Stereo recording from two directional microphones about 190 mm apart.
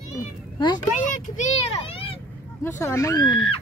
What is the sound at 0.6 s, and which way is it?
Speech, 20° left (ahead or behind).